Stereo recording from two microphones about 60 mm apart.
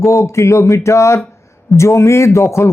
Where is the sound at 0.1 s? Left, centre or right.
Left.